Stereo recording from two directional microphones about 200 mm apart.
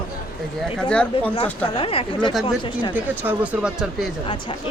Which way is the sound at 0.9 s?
5° left (ahead or behind).